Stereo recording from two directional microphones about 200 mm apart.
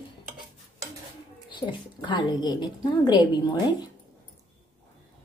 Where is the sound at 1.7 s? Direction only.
25° left (ahead or behind).